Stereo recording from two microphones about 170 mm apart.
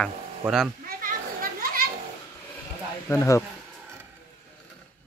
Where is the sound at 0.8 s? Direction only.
55° right (ahead or behind).